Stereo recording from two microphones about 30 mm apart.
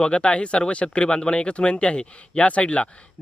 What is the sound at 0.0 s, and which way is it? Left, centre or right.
Speech, left.